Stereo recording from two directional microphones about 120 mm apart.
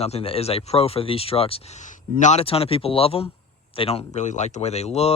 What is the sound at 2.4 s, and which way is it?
Speech, 55° left (ahead or behind).